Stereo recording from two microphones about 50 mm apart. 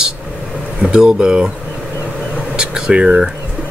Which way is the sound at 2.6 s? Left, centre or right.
Centre.